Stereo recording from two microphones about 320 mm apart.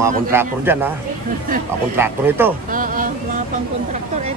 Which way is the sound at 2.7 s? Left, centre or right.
Right.